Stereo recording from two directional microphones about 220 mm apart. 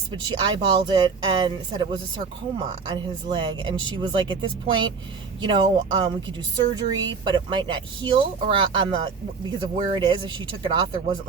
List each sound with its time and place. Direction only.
0.1 s speech: 20° right (ahead or behind)